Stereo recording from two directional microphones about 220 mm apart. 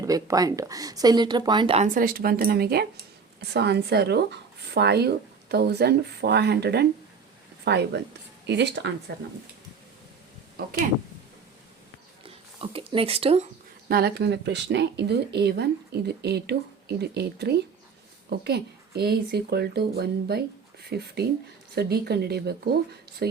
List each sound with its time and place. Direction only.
0.0 s speech: 15° right (ahead or behind); by 9.2 s 50° right (ahead or behind)
12.2 s speech: 25° right (ahead or behind)
13.8 s speech: 45° right (ahead or behind)